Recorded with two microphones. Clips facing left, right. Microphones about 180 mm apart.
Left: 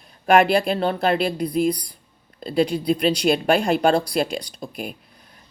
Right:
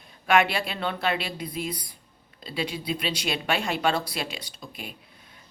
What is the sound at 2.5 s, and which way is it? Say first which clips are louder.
Speech: left 10 dB; 40° left (ahead or behind).